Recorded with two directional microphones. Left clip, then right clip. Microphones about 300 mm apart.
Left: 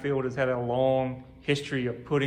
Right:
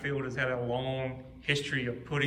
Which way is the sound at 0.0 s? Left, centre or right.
Centre.